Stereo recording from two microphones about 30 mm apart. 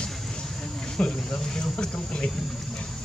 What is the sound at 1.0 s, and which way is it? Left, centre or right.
Speech, left.